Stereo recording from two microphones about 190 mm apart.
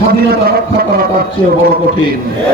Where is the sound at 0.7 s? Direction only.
55° right (ahead or behind).